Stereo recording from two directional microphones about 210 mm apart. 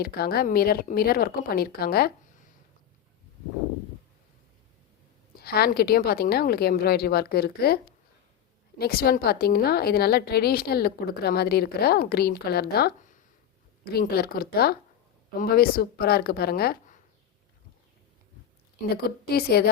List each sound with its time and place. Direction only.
0.0 s a woman's voice: 45° left (ahead or behind)
5.4 s a woman's voice: 50° left (ahead or behind)
19.0 s a woman's voice: 45° left (ahead or behind)